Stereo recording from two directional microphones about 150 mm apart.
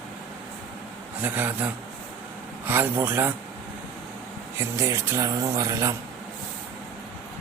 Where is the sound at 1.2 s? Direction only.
10° right (ahead or behind).